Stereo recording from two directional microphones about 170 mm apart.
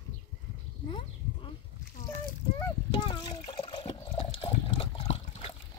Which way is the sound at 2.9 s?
25° left (ahead or behind).